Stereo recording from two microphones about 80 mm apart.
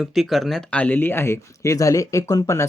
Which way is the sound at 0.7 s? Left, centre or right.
Centre.